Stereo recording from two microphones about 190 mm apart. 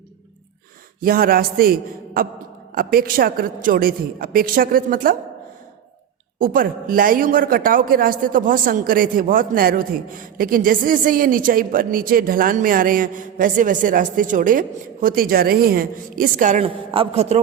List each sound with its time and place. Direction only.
1.0 s a woman's voice: 50° right (ahead or behind)
6.4 s a woman's voice: 50° right (ahead or behind)
16.6 s a man's voice: 30° right (ahead or behind)